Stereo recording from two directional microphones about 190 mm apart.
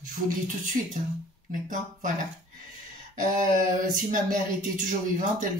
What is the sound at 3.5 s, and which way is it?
Speech, 45° right (ahead or behind).